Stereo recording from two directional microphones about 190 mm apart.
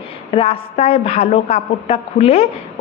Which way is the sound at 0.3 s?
30° left (ahead or behind).